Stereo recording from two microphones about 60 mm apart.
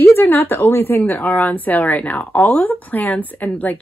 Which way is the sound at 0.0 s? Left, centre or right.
Left.